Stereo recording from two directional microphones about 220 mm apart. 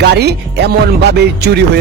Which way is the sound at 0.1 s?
50° right (ahead or behind).